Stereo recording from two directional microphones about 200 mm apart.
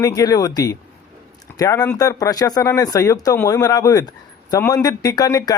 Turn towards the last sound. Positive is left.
turn(degrees=20)  # may be behind; listen again after turning